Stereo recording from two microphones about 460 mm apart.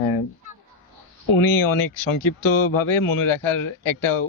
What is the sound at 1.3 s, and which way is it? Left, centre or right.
A man's voice, left.